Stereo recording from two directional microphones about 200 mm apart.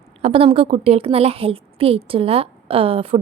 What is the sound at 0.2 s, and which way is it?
A woman's voice, 30° right (ahead or behind).